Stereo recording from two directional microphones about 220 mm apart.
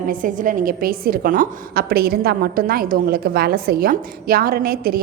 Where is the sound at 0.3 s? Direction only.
40° right (ahead or behind).